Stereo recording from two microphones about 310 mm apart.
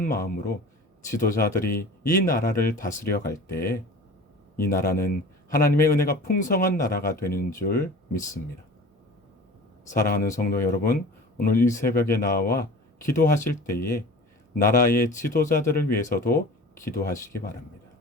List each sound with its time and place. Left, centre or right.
0.0 s speech: left
10.0 s speech: left
17.1 s speech: centre